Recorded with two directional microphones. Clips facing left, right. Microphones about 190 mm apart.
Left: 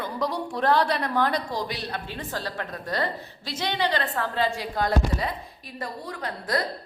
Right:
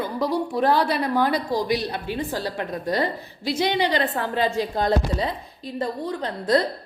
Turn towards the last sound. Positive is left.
turn(degrees=-25)  # may be behind; listen again after turning